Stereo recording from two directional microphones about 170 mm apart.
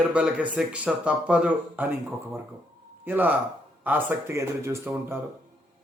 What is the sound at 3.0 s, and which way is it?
Speech, 10° right (ahead or behind).